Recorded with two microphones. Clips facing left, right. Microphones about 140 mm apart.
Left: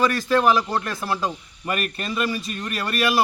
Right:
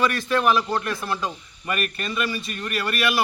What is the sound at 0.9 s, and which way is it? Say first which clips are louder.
Speech: left 1 dB; 35° left (ahead or behind).